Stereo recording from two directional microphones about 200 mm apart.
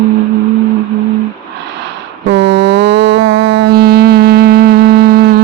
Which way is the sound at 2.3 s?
60° right (ahead or behind).